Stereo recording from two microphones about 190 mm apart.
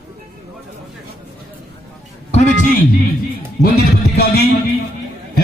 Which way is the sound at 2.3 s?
40° left (ahead or behind).